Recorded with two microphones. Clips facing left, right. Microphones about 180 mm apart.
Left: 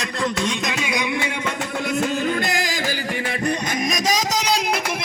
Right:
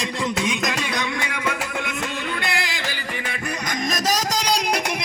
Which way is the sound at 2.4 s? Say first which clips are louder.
Left 3 dB; 40° left (ahead or behind).